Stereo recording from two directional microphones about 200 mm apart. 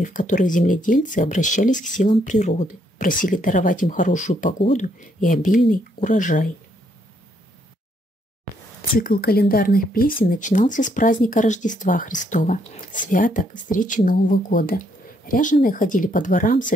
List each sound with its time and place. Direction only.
0.0 s speech: 40° left (ahead or behind)
9.2 s speech: 50° left (ahead or behind)